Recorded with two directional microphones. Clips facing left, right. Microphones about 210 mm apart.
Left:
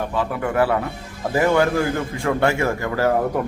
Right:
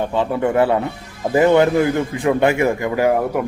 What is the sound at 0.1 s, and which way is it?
A man's voice, 25° right (ahead or behind).